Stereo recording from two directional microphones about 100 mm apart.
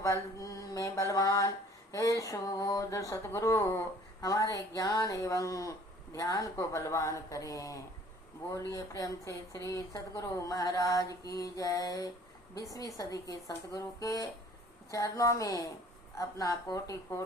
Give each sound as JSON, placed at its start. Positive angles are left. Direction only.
{"t": 0.0, "sound": "mantra", "side_deg": 35}